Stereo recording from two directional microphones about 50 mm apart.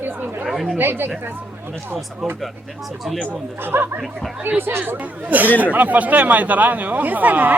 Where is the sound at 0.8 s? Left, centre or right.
Right.